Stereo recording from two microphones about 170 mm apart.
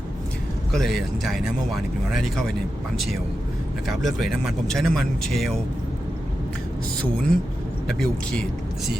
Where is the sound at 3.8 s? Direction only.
Centre (ahead or behind).